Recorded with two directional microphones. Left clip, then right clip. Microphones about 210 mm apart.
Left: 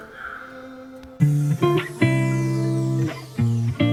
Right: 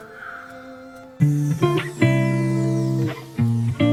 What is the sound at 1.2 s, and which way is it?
Music, centre (ahead or behind).